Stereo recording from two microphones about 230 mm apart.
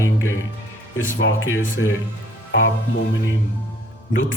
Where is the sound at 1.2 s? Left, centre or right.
Left.